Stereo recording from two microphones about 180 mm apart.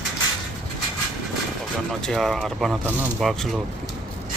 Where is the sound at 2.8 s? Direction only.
10° right (ahead or behind).